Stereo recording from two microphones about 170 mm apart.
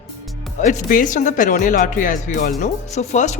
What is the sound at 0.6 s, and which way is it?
A woman's voice, 50° left (ahead or behind).